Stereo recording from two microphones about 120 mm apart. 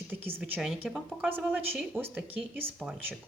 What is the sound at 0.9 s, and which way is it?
Speech, centre (ahead or behind).